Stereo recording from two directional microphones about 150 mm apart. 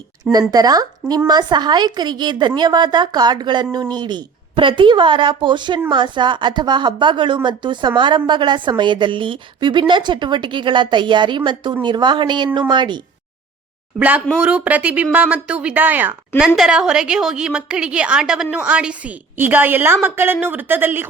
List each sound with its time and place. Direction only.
0.5 s a woman's voice: 25° right (ahead or behind)
14.4 s a woman's voice: 10° right (ahead or behind)